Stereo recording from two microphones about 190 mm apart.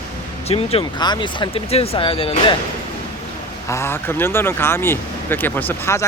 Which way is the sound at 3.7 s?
15° left (ahead or behind).